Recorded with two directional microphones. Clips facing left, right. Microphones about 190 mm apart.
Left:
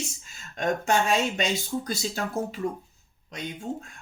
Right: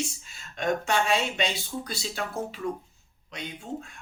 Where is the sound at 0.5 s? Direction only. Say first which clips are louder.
Left 2 dB; 45° left (ahead or behind).